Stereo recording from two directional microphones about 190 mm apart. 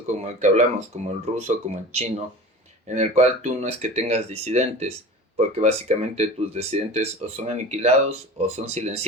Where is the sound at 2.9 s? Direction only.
35° right (ahead or behind).